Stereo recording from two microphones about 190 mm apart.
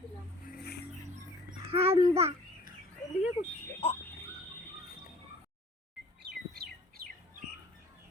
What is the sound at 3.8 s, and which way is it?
Speech, 30° left (ahead or behind).